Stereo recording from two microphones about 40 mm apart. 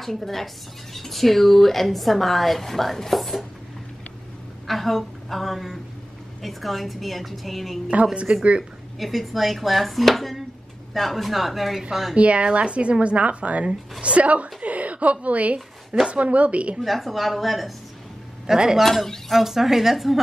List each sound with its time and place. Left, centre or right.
0.0 s a woman's voice: centre
4.6 s a woman's voice: centre
7.9 s a woman's voice: right
9.0 s a woman's voice: centre
12.2 s a woman's voice: right
16.8 s a woman's voice: centre
18.5 s a woman's voice: centre